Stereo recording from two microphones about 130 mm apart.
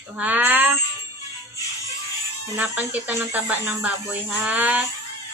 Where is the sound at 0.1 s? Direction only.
10° right (ahead or behind).